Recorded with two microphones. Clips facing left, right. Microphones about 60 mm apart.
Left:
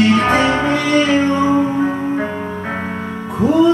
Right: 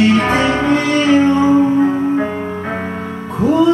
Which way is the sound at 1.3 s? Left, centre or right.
Centre.